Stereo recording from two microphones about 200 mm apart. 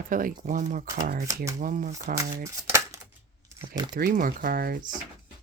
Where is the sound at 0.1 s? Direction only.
40° right (ahead or behind).